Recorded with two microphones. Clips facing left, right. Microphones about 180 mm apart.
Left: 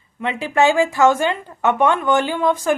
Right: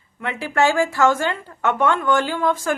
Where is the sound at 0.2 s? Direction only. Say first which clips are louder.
Left 3 dB; 20° left (ahead or behind).